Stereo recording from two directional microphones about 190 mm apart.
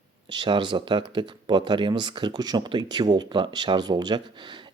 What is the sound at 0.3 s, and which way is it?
Speech, 25° right (ahead or behind).